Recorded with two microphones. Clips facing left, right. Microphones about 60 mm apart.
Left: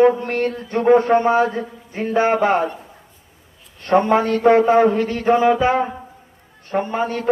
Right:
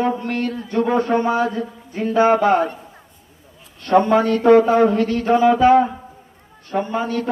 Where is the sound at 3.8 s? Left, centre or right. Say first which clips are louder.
Right 1 dB; left.